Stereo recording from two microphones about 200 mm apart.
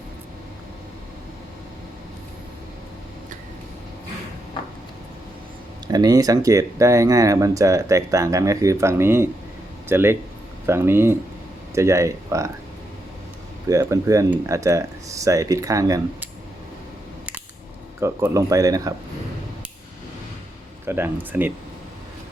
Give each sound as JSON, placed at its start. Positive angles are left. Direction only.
{"t": 5.9, "sound": "speech", "side_deg": -20}
{"t": 13.7, "sound": "speech", "side_deg": -15}
{"t": 18.0, "sound": "speech", "side_deg": -15}
{"t": 20.8, "sound": "speech", "side_deg": -10}